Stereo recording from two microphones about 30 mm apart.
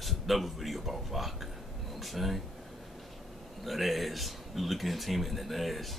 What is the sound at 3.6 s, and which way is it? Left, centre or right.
Speech, centre.